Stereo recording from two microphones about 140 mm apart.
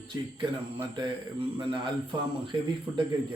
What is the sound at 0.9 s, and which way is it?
Speech, 35° right (ahead or behind).